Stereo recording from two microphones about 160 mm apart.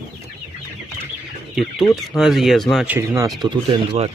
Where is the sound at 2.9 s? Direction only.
15° right (ahead or behind).